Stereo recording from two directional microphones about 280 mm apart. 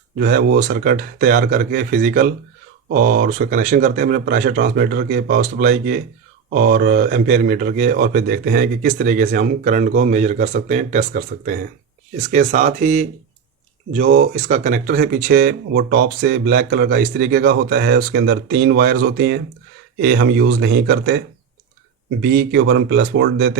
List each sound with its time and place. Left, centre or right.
0.2 s a man's voice: right
22.2 s speech: right